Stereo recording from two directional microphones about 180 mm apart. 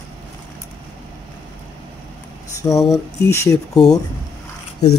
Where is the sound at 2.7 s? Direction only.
Centre (ahead or behind).